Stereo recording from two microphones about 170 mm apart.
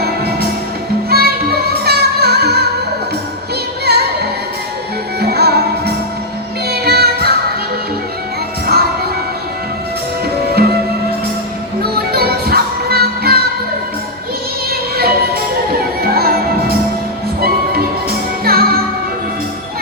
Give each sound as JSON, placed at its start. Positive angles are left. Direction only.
{"t": 1.1, "sound": "music", "side_deg": -65}
{"t": 3.8, "sound": "music", "side_deg": -75}
{"t": 8.6, "sound": "music", "side_deg": -65}
{"t": 10.5, "sound": "music", "side_deg": -70}
{"t": 12.1, "sound": "music", "side_deg": -65}
{"t": 14.7, "sound": "music", "side_deg": -65}